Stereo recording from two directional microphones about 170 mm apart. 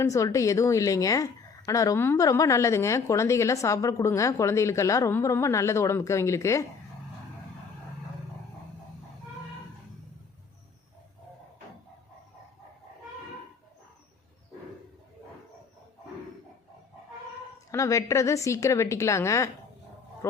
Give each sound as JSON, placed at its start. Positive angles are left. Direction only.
{"t": 0.0, "sound": "a woman's voice", "side_deg": 20}
{"t": 17.7, "sound": "a woman's voice", "side_deg": 20}